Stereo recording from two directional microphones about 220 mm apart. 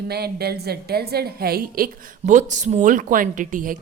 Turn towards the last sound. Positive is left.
turn(degrees=-35)  # may be behind; listen again after turning